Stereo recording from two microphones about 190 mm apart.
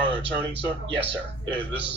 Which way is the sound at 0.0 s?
25° right (ahead or behind).